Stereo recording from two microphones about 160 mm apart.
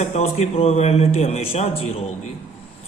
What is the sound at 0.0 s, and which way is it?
A man's voice, 45° left (ahead or behind).